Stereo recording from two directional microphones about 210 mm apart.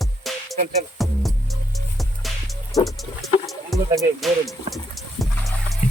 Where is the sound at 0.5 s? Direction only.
30° right (ahead or behind).